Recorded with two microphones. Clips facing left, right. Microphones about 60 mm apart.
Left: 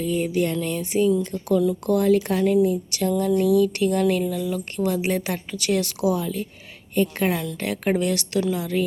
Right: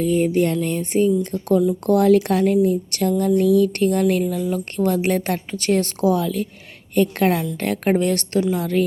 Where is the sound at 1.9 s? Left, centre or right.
Right.